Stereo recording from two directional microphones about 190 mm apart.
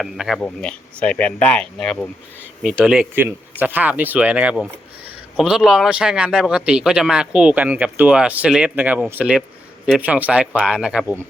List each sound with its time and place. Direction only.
0.0 s a man's voice: centre (ahead or behind)